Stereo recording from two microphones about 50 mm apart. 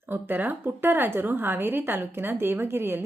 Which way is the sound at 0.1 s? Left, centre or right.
Right.